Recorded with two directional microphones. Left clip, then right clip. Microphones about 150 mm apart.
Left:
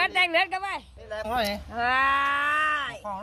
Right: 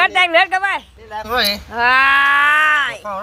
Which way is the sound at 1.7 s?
10° right (ahead or behind).